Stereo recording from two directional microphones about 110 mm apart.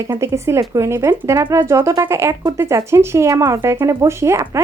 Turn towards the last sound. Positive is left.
turn(degrees=-25)  # may be behind; listen again after turning